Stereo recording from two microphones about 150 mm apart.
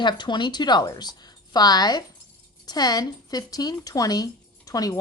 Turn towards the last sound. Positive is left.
turn(degrees=25)  # may be behind; listen again after turning